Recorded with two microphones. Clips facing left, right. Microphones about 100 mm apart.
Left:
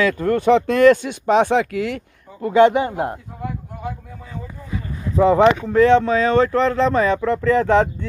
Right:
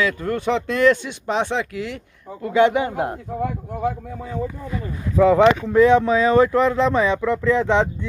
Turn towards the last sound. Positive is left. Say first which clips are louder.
# left 2 dB
turn(degrees=0)  # may be behind; listen again after turning